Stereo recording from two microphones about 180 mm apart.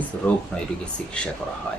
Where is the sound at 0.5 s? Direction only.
5° left (ahead or behind).